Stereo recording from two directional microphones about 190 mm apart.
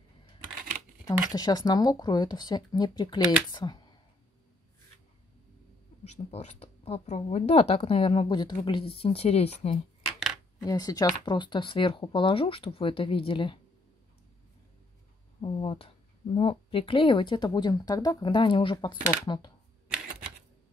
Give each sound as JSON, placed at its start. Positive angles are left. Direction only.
{"t": 1.0, "sound": "speech", "side_deg": 20}
{"t": 6.0, "sound": "speech", "side_deg": 35}
{"t": 10.6, "sound": "speech", "side_deg": 20}
{"t": 15.4, "sound": "speech", "side_deg": 30}